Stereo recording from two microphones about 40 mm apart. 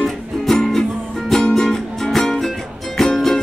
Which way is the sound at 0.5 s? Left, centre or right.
Centre.